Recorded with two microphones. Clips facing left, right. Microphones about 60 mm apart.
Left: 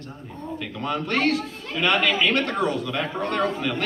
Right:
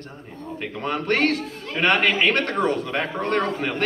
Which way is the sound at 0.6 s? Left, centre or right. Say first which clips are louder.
Right 1 dB; right.